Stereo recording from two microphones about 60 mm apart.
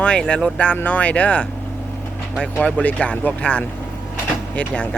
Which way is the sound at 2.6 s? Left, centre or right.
Left.